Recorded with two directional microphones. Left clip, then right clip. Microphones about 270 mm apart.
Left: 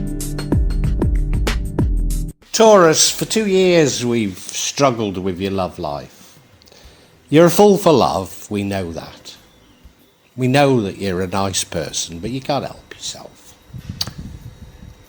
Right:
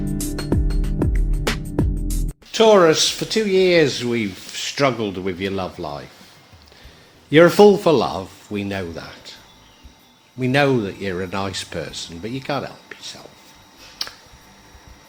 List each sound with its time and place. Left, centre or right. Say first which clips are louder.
0.2 s music: left 2 dB; centre
2.5 s speech: left 3 dB; left
7.3 s speech: even; centre
10.4 s speech: left 3 dB; centre